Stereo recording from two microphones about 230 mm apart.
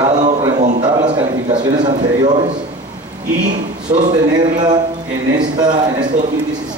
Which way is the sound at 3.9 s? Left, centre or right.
Right.